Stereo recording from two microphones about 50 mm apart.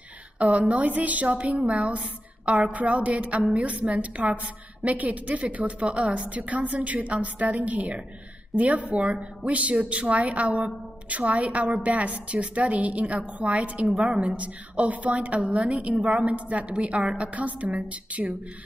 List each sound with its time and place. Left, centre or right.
0.4 s a woman's voice: right
13.9 s a woman's voice: centre
14.3 s a woman's voice: right